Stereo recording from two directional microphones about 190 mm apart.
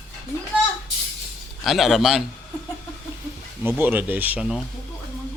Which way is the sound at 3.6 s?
10° right (ahead or behind).